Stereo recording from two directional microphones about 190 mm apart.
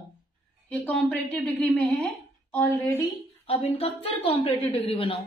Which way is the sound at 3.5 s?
30° left (ahead or behind).